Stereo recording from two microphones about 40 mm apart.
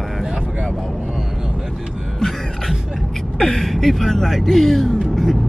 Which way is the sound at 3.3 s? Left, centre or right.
Centre.